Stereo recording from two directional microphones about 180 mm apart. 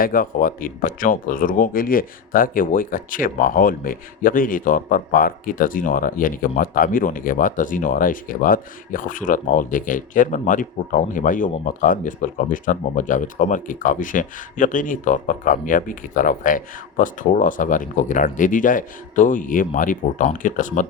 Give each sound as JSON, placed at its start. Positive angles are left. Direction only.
{"t": 0.0, "sound": "speech", "side_deg": 50}